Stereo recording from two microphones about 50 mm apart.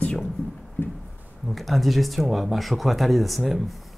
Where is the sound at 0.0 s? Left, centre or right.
Left.